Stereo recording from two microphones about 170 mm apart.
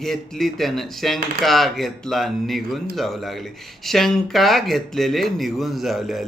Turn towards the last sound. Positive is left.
turn(degrees=0)  # may be behind; listen again after turning